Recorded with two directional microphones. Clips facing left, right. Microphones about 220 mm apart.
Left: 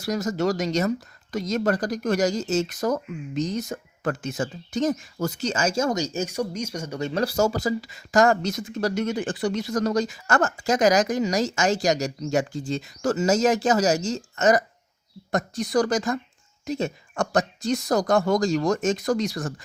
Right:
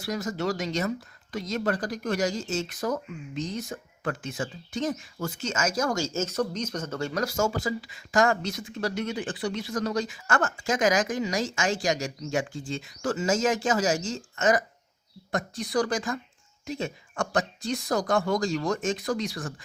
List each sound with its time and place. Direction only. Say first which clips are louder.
0.0 s speech: left 5 dB; 40° left (ahead or behind); by 7.1 s 15° left (ahead or behind)
7.1 s speech: left 5 dB; 30° left (ahead or behind)